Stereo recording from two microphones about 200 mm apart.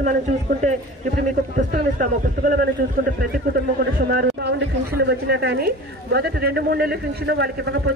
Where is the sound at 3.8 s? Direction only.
55° right (ahead or behind).